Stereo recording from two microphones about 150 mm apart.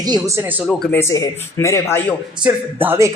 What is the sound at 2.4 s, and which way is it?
Speech, 15° right (ahead or behind).